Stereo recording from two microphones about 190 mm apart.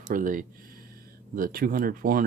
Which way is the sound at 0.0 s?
45° right (ahead or behind).